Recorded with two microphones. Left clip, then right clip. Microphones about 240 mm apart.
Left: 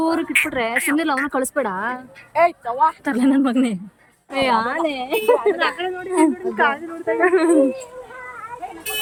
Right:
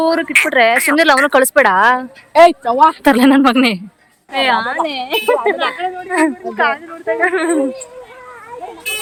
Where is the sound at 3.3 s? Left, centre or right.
Centre.